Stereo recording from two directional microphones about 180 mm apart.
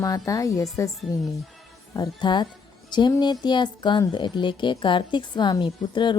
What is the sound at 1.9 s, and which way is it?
Speech, 20° left (ahead or behind).